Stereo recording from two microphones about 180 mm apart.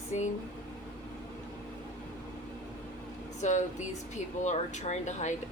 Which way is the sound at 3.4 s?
40° left (ahead or behind).